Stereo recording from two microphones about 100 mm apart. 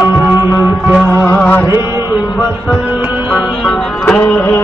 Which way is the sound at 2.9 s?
15° right (ahead or behind).